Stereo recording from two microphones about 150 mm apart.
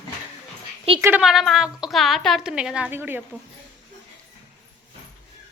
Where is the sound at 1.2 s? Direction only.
Centre (ahead or behind).